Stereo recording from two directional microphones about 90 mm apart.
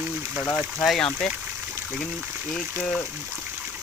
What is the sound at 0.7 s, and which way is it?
Speech, centre (ahead or behind).